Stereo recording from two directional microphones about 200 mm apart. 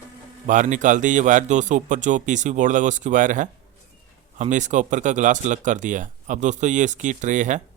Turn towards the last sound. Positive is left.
turn(degrees=-40)  # may be behind; listen again after turning